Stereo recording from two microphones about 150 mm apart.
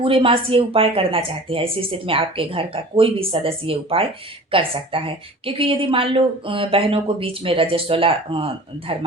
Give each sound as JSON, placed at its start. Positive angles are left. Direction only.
{"t": 0.0, "sound": "a woman's voice", "side_deg": -35}